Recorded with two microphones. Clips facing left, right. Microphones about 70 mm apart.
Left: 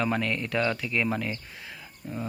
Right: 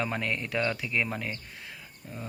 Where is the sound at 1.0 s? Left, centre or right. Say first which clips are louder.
Left 5 dB; centre.